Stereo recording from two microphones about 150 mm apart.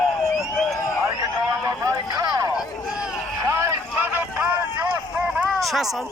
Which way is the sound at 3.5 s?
20° right (ahead or behind).